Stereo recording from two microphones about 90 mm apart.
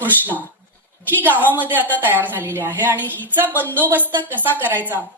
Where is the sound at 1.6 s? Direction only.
20° right (ahead or behind).